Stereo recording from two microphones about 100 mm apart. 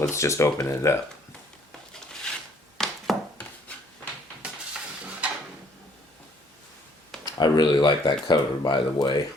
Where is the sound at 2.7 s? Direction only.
Centre (ahead or behind).